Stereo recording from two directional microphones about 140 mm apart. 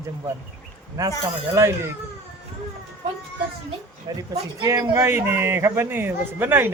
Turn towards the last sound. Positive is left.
turn(degrees=-15)  # may be behind; listen again after turning